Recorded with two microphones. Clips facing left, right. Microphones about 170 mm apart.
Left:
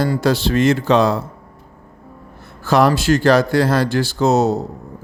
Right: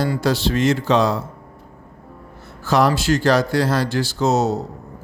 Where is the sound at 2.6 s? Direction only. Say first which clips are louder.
Left 3 dB; 55° left (ahead or behind).